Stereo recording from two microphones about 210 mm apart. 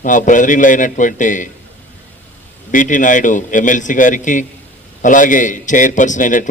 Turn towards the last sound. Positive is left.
turn(degrees=40)  # may be behind; listen again after turning